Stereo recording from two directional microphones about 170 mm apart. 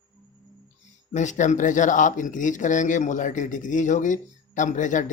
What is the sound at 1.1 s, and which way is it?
Speech, 45° left (ahead or behind).